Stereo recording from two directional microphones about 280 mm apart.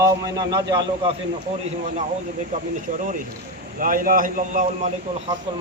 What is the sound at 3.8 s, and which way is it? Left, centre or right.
A man's voice, right.